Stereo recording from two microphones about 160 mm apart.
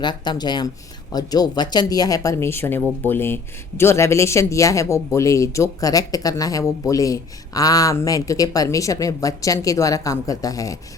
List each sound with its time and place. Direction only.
0.0 s speech: 25° left (ahead or behind)